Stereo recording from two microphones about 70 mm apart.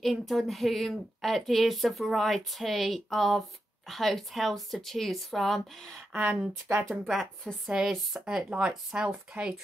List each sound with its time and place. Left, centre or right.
0.0 s a woman's voice: centre
5.9 s speech: right
6.9 s a woman's voice: centre